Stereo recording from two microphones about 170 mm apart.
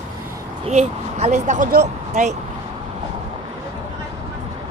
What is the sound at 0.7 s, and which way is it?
Speech, 45° right (ahead or behind).